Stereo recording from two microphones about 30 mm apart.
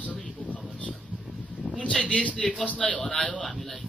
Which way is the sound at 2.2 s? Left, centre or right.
Left.